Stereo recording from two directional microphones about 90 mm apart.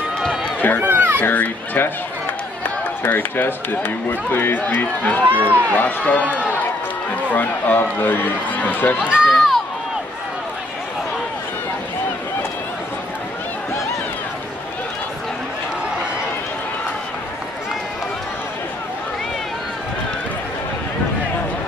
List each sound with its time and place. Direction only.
0.8 s a sound: 25° right (ahead or behind)
1.2 s speech: 20° left (ahead or behind)
6.2 s speech: 15° right (ahead or behind)
7.3 s speech: 20° left (ahead or behind)
9.0 s run: 10° right (ahead or behind)